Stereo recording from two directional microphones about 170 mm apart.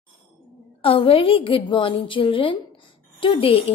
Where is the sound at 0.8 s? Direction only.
35° left (ahead or behind).